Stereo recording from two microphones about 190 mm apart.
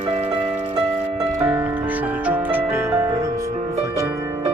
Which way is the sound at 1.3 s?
10° right (ahead or behind).